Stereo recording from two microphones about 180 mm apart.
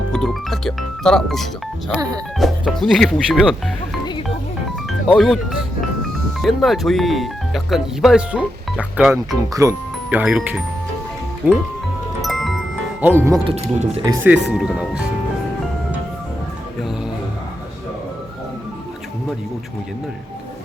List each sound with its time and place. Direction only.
0.1 s speech: 5° left (ahead or behind)
4.9 s music: centre (ahead or behind)
6.4 s speech: centre (ahead or behind)
9.5 s speech: 20° right (ahead or behind)
12.2 s music: centre (ahead or behind)
13.0 s speech: 10° right (ahead or behind)
13.5 s speech: 35° right (ahead or behind)
14.0 s speech: 20° right (ahead or behind)
14.6 s speech: 5° right (ahead or behind)